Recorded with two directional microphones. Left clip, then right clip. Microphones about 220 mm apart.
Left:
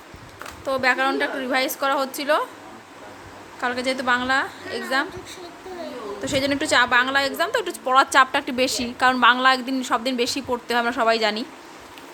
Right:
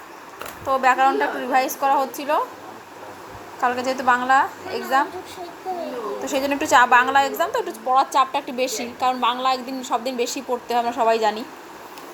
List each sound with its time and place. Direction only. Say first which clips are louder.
0.7 s a woman's voice: right 3 dB; 30° left (ahead or behind)
3.8 s a woman's voice: even; 30° left (ahead or behind)
6.2 s a woman's voice: left 1 dB; 20° left (ahead or behind)